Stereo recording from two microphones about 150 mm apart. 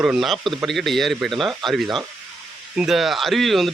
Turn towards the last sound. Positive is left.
turn(degrees=0)  # may be behind; listen again after turning